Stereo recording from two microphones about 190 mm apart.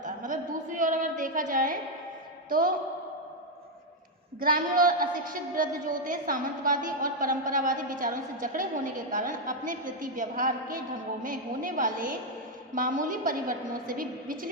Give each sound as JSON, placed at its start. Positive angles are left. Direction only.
{"t": 0.0, "sound": "a sound", "side_deg": -45}
{"t": 2.5, "sound": "a woman's voice", "side_deg": -50}
{"t": 4.4, "sound": "a woman's voice", "side_deg": -50}